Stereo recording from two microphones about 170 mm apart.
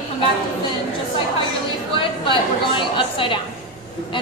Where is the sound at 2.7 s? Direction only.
30° left (ahead or behind).